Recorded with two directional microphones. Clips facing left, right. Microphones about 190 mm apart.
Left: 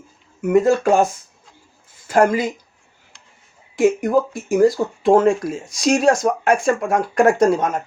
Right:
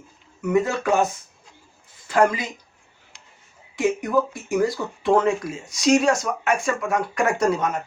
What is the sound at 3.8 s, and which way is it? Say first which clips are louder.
Speech: left 5 dB; 45° left (ahead or behind).